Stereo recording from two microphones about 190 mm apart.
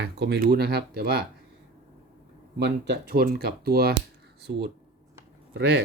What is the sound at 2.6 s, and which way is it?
Speech, 60° right (ahead or behind).